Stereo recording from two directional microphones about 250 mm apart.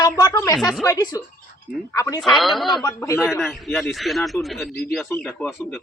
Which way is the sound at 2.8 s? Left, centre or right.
Centre.